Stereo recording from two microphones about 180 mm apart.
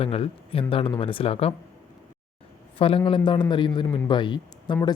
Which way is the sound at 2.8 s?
30° left (ahead or behind).